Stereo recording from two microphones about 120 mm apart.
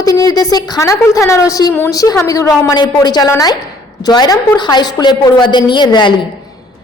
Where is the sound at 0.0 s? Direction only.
30° left (ahead or behind).